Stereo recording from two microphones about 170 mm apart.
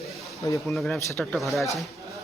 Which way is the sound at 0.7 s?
5° left (ahead or behind).